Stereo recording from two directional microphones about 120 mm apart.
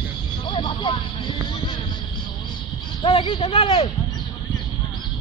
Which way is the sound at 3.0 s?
45° left (ahead or behind).